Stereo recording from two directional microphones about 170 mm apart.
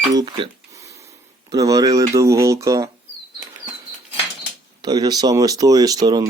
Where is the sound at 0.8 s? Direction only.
20° right (ahead or behind).